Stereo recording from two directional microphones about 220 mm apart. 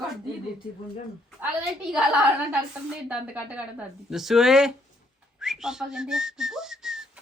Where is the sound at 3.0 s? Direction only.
5° right (ahead or behind).